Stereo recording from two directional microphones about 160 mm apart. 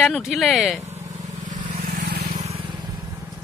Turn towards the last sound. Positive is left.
turn(degrees=-25)  # may be behind; listen again after turning